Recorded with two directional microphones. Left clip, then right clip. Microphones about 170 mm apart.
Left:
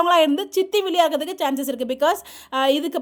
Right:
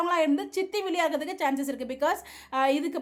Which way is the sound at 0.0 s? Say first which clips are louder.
Left 8 dB; 40° left (ahead or behind).